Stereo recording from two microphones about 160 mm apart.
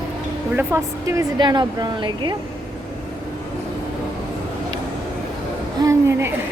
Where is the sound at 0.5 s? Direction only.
20° right (ahead or behind).